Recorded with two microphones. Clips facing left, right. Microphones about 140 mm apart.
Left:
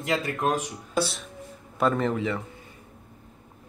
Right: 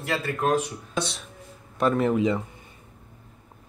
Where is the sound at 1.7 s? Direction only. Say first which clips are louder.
Right 2 dB; 5° right (ahead or behind).